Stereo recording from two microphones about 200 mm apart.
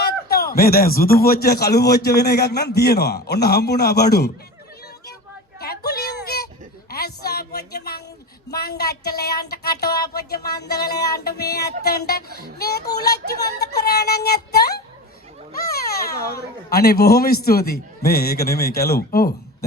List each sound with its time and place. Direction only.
0.0 s a man's voice: 50° left (ahead or behind)
5.5 s a sound: 50° left (ahead or behind)
8.4 s a man's voice: 55° left (ahead or behind)
13.8 s a man's voice: 50° left (ahead or behind)